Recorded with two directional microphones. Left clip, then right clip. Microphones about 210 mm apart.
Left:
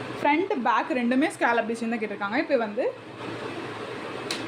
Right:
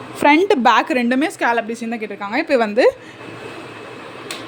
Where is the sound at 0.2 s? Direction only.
50° right (ahead or behind); by 2.6 s 30° right (ahead or behind).